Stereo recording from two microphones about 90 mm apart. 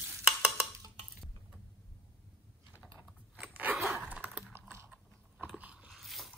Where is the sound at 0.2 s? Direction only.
10° right (ahead or behind).